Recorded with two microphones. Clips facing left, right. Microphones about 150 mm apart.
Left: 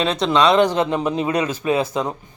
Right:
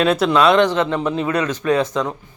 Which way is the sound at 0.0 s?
5° right (ahead or behind).